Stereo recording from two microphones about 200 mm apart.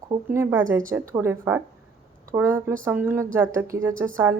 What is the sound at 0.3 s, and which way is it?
Speech, 10° right (ahead or behind).